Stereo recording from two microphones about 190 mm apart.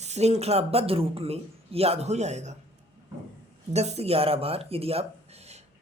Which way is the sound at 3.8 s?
35° right (ahead or behind).